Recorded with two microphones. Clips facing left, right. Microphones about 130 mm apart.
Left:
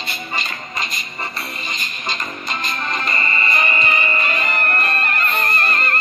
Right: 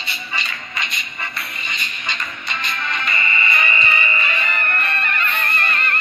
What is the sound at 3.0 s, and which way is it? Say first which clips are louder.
Music: left 1 dB; 40° left (ahead or behind).